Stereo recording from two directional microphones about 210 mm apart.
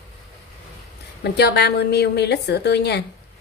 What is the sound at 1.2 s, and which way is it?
A woman's voice, 50° left (ahead or behind).